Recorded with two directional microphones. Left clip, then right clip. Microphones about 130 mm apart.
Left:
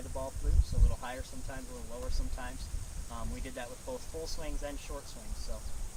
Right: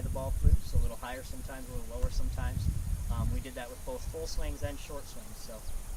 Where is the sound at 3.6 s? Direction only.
15° right (ahead or behind).